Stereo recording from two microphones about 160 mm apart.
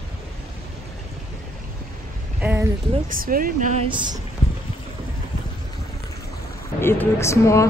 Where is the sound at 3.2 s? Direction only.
60° right (ahead or behind).